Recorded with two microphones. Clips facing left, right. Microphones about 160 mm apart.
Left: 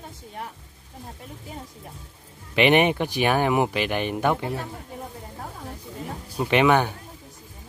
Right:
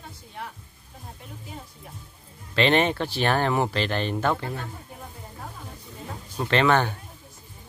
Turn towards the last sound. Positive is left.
turn(degrees=15)  # may be behind; listen again after turning